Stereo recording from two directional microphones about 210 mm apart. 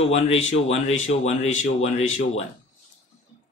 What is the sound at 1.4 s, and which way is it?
Speech, 70° left (ahead or behind).